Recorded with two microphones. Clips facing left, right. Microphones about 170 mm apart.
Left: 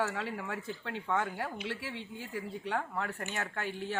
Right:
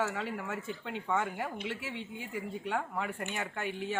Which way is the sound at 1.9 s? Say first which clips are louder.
Right 1 dB; 55° right (ahead or behind).